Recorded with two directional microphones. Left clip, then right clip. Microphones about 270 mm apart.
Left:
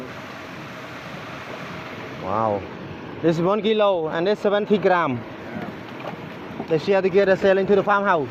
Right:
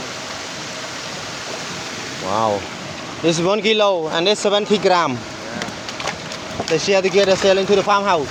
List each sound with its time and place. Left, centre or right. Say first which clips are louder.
2.3 s speech: right 3 dB; centre
6.7 s speech: right 3 dB; centre